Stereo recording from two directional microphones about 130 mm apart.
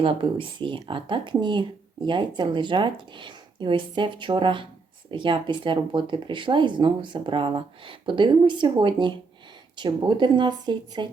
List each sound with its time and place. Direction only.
0.0 s speech: 45° right (ahead or behind)